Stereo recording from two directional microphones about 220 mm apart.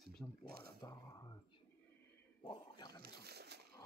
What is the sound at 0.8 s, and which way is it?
Speech, 20° left (ahead or behind).